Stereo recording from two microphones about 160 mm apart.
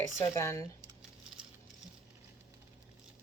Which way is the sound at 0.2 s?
20° left (ahead or behind).